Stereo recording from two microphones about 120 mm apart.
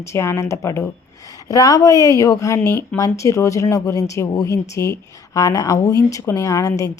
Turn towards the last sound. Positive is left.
turn(degrees=30)  # may be behind; listen again after turning